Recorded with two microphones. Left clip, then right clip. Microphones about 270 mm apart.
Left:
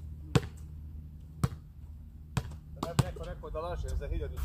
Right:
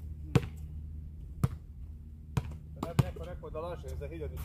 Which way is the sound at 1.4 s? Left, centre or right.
Centre.